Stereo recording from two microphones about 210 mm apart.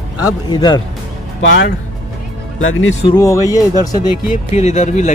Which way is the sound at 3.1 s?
15° left (ahead or behind).